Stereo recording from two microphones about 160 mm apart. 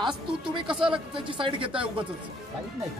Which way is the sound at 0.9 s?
30° right (ahead or behind).